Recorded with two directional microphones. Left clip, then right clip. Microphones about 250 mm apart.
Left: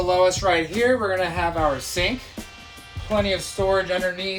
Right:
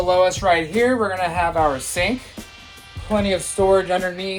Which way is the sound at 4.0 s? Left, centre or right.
Centre.